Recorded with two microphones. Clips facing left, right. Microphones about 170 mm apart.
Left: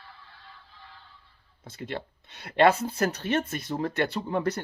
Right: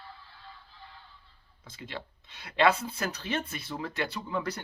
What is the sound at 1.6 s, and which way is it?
Speech, 50° left (ahead or behind).